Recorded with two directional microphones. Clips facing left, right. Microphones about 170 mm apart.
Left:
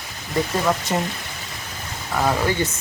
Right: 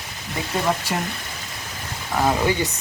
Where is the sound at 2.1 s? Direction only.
10° right (ahead or behind).